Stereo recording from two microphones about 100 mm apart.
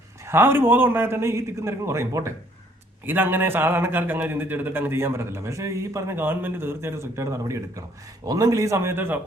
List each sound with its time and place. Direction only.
0.3 s a man's voice: 25° right (ahead or behind)